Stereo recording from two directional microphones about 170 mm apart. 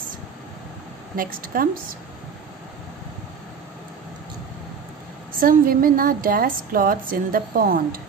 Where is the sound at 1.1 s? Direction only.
55° right (ahead or behind).